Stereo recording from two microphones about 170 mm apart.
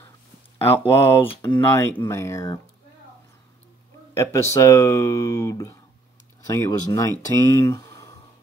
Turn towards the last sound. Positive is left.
turn(degrees=15)  # may be behind; listen again after turning